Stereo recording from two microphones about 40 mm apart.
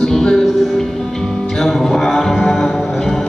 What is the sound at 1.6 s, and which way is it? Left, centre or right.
Mantra, centre.